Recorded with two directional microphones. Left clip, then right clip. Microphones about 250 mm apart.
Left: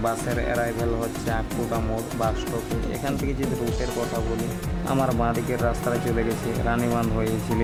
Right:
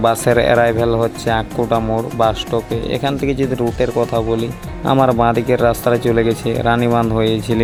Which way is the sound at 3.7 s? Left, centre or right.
Centre.